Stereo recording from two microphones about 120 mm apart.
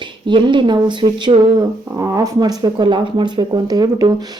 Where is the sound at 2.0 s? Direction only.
25° right (ahead or behind).